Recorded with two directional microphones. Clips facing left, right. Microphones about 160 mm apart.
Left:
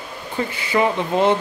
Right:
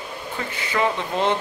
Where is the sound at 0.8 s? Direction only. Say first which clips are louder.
Left 4 dB; 10° left (ahead or behind).